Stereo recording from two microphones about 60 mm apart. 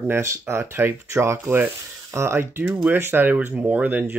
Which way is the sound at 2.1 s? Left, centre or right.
Right.